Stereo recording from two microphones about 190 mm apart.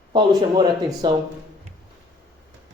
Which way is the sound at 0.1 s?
25° right (ahead or behind).